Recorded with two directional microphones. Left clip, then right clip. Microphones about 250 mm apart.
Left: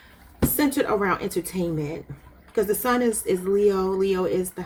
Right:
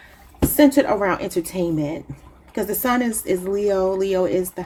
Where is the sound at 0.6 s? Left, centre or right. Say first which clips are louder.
Right 7 dB; right.